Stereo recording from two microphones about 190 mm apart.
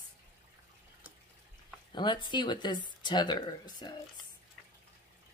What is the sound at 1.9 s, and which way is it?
Speech, 25° left (ahead or behind).